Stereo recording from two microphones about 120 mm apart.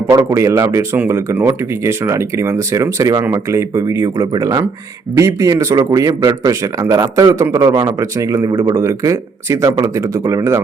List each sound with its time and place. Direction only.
0.3 s speech: 25° right (ahead or behind)